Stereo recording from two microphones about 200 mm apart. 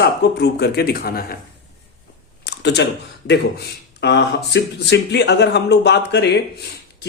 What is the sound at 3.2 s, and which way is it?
Speech, 55° left (ahead or behind).